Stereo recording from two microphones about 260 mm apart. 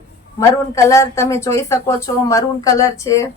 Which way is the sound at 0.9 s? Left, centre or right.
Centre.